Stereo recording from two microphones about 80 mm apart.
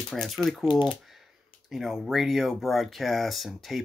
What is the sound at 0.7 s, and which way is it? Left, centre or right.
Speech, left.